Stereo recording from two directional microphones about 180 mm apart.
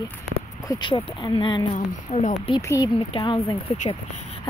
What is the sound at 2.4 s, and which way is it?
Speech, 25° left (ahead or behind).